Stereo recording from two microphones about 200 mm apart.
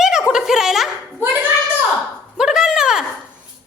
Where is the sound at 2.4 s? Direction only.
5° right (ahead or behind).